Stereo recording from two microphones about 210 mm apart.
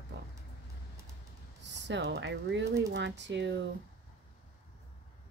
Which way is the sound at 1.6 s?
55° right (ahead or behind).